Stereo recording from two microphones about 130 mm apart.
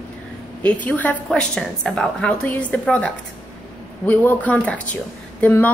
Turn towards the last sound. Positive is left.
turn(degrees=15)  # may be behind; listen again after turning